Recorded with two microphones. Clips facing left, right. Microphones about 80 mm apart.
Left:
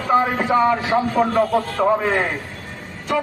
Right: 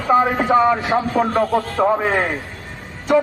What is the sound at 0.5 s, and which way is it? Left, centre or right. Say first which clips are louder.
A man's voice: right 1 dB; centre.